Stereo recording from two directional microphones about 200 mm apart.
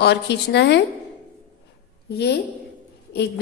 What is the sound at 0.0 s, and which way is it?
Speech, 55° left (ahead or behind).